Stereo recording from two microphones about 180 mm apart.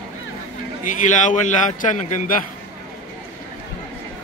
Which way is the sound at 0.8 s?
45° left (ahead or behind).